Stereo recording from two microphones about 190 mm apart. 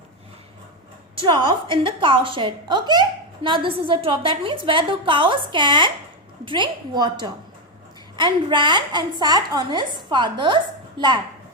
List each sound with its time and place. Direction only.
1.2 s a woman's voice: 25° right (ahead or behind)